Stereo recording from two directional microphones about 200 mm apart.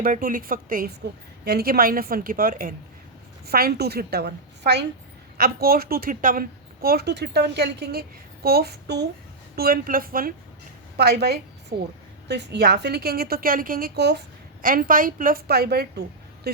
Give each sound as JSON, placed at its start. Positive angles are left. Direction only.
{"t": 0.0, "sound": "a woman's voice", "side_deg": -45}
{"t": 14.6, "sound": "a woman's voice", "side_deg": -45}